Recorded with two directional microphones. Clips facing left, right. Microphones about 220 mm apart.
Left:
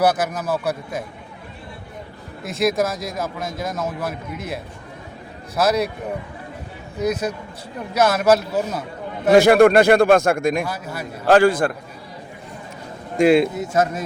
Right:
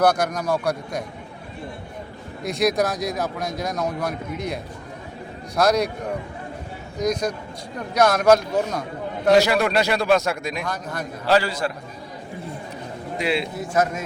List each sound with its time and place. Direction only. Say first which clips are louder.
0.0 s speech: even; 5° left (ahead or behind)
2.4 s speech: left 1 dB; centre (ahead or behind)
7.0 s speech: left 1 dB; 5° left (ahead or behind)
9.3 s speech: left 7 dB; 50° left (ahead or behind)
10.6 s speech: left 2 dB; 5° left (ahead or behind)
11.3 s speech: left 6 dB; 50° left (ahead or behind)
13.1 s speech: left 10 dB; 50° left (ahead or behind)
13.6 s a man's voice: left 2 dB; 30° left (ahead or behind)